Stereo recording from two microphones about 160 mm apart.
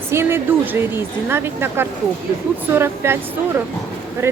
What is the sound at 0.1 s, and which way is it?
A woman's voice, 15° right (ahead or behind).